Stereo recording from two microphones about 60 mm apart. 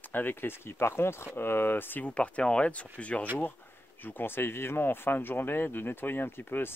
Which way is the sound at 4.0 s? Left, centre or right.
Left.